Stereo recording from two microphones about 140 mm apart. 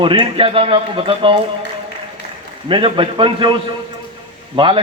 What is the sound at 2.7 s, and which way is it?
A man's voice, 35° right (ahead or behind).